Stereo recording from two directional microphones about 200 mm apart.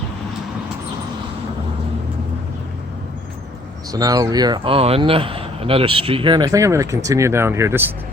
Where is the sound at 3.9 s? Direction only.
20° right (ahead or behind).